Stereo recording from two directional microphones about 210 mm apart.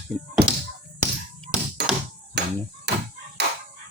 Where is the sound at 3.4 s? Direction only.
50° right (ahead or behind).